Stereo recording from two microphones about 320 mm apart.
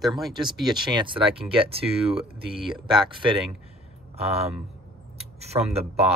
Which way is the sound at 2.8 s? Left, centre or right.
Centre.